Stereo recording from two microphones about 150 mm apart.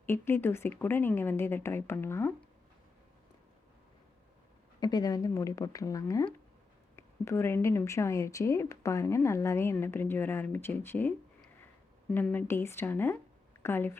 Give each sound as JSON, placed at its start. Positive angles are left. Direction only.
{"t": 0.0, "sound": "speech", "side_deg": 15}
{"t": 4.8, "sound": "speech", "side_deg": 25}
{"t": 12.1, "sound": "speech", "side_deg": 10}